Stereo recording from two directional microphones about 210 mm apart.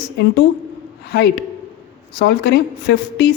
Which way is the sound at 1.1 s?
50° left (ahead or behind).